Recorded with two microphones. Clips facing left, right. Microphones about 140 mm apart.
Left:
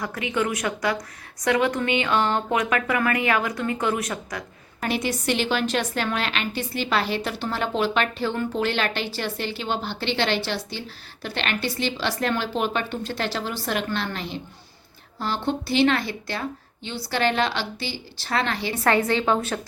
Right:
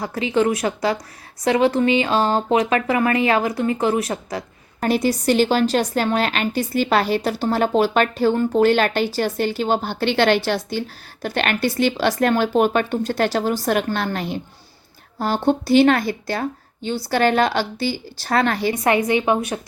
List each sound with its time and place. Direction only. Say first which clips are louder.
0.0 s speech: right 6 dB; 30° right (ahead or behind)
4.8 s a woman's voice: right 7 dB; 40° right (ahead or behind)
18.7 s a woman's voice: even; 15° right (ahead or behind)